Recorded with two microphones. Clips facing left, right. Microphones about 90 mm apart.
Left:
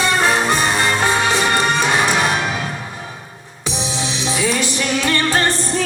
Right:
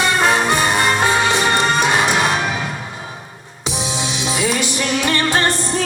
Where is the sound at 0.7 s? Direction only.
20° right (ahead or behind).